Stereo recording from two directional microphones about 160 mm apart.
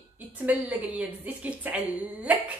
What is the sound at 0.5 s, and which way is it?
A woman's voice, 10° right (ahead or behind).